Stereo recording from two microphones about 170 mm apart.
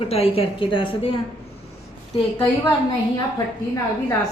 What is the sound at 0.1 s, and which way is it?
A woman's voice, 35° left (ahead or behind).